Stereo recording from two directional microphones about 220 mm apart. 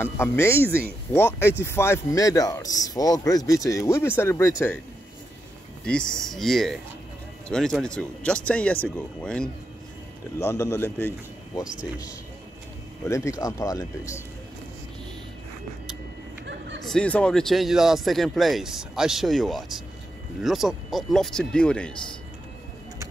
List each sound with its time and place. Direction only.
0.0 s speech: 10° left (ahead or behind)
5.9 s speech: 5° left (ahead or behind)
13.1 s speech: 15° left (ahead or behind)
16.4 s a sound: 55° right (ahead or behind)
16.8 s speech: 5° left (ahead or behind)